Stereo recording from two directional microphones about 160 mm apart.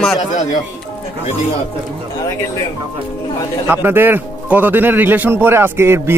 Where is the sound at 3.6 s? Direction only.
15° right (ahead or behind).